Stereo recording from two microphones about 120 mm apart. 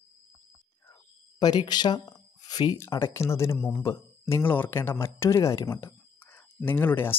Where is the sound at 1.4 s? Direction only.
35° left (ahead or behind).